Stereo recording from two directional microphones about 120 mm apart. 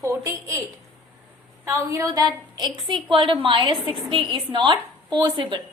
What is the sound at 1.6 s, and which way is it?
A woman's voice, 25° right (ahead or behind).